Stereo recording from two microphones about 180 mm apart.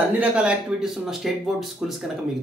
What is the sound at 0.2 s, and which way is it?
Speech, 5° right (ahead or behind).